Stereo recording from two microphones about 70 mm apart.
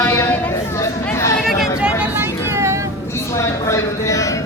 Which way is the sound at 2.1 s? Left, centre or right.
Right.